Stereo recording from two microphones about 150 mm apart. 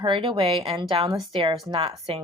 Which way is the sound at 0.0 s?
35° right (ahead or behind).